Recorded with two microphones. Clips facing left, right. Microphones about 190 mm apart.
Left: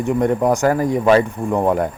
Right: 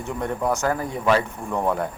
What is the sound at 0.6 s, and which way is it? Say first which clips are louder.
Speech: left 8 dB; 75° left (ahead or behind).